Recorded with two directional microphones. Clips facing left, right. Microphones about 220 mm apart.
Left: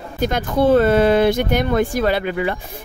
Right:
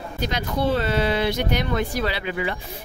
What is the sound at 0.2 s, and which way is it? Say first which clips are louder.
A woman's voice: left 7 dB; 50° left (ahead or behind).